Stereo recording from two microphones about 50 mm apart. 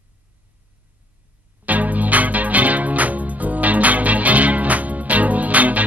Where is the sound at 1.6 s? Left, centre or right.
Right.